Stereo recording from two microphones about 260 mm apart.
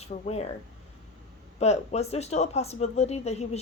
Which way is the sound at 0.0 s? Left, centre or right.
Left.